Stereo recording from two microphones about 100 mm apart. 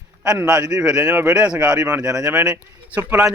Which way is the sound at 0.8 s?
10° right (ahead or behind).